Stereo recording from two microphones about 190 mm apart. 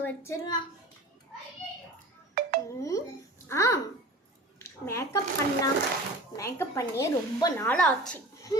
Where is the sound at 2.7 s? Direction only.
15° left (ahead or behind).